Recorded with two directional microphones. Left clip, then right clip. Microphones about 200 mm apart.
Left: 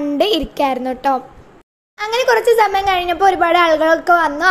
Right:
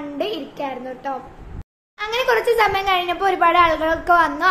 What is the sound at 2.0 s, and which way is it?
Speech, 25° left (ahead or behind).